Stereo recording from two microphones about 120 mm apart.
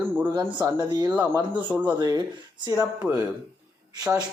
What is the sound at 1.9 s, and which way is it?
Speech, 35° right (ahead or behind).